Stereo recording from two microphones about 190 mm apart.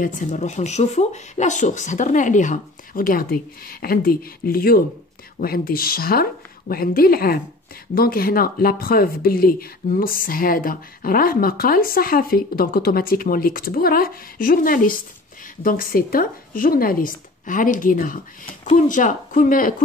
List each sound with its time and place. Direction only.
0.0 s speech: 40° left (ahead or behind)